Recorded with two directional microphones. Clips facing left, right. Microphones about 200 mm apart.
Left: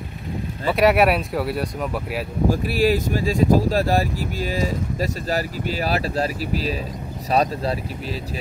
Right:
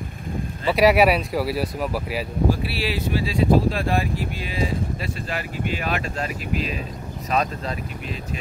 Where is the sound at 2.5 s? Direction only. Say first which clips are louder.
Left 5 dB; 45° left (ahead or behind).